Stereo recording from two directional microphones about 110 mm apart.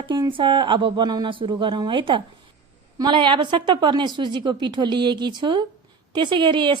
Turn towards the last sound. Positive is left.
turn(degrees=-45)  # may be behind; listen again after turning